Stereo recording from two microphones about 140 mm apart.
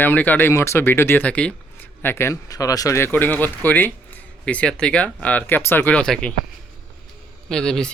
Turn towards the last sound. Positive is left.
turn(degrees=5)  # may be behind; listen again after turning